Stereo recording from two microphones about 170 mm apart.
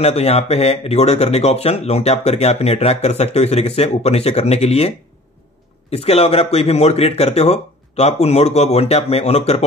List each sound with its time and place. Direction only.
0.0 s speech: 40° left (ahead or behind)